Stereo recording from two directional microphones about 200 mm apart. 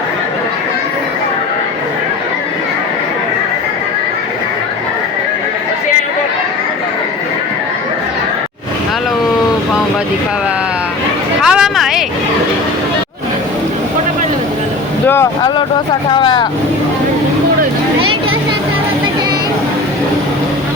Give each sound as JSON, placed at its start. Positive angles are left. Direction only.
{"t": 11.4, "sound": "a sound", "side_deg": 0}
{"t": 15.0, "sound": "vehicle", "side_deg": 10}
{"t": 16.0, "sound": "speech", "side_deg": 25}